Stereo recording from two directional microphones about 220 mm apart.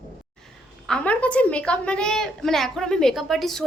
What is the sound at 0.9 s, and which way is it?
A woman's voice, 5° left (ahead or behind).